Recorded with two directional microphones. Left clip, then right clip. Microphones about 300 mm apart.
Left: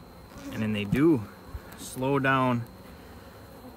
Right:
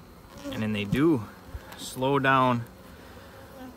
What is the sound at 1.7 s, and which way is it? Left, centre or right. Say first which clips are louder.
Speech: right 2 dB; centre.